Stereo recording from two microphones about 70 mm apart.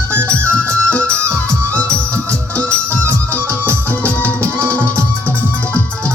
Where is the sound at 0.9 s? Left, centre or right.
Centre.